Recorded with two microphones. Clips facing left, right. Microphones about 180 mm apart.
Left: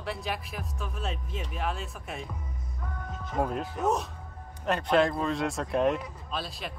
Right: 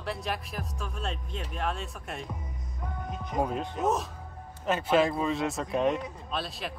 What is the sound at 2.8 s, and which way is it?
Music, 15° right (ahead or behind).